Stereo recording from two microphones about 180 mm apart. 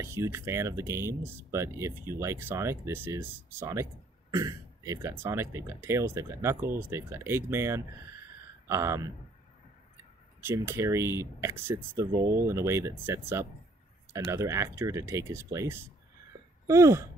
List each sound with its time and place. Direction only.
0.0 s speech: 15° right (ahead or behind)
10.4 s speech: 15° right (ahead or behind)